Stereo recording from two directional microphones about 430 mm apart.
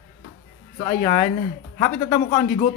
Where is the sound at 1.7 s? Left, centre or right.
Centre.